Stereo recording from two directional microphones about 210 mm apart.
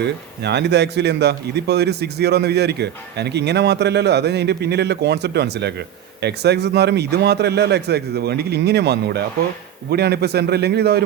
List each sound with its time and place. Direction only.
0.0 s a man's voice: 55° right (ahead or behind)